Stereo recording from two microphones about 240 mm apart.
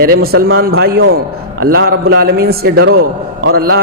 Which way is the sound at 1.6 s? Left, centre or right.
Right.